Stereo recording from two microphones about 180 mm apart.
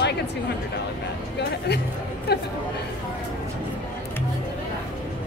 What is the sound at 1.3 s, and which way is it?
A woman's voice, 65° left (ahead or behind).